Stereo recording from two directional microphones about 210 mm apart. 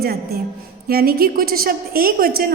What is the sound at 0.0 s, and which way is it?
A woman's voice, 50° right (ahead or behind).